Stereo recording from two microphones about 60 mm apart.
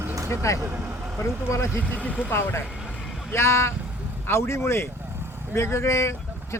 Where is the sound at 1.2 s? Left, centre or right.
Left.